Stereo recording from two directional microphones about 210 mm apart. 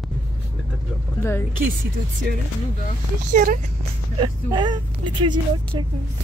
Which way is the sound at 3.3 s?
40° right (ahead or behind).